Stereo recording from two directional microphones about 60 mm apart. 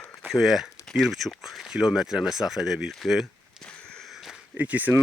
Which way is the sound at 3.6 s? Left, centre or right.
Centre.